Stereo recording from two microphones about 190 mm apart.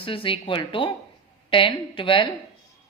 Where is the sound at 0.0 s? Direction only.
30° left (ahead or behind).